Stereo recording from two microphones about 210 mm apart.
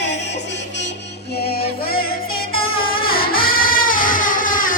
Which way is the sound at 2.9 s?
45° left (ahead or behind).